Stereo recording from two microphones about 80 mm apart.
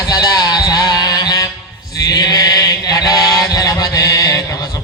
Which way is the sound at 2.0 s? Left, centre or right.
Left.